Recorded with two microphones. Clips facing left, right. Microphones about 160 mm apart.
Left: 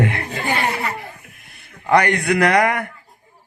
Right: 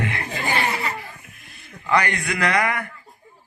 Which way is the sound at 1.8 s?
55° left (ahead or behind).